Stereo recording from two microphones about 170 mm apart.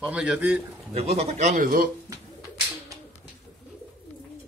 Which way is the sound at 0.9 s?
40° right (ahead or behind).